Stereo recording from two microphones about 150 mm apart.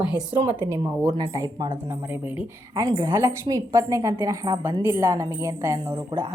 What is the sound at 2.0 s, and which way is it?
Speech, 10° right (ahead or behind).